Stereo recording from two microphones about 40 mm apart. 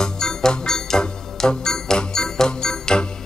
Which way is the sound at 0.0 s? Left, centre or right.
Centre.